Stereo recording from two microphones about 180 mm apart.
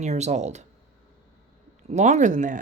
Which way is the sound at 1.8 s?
40° right (ahead or behind).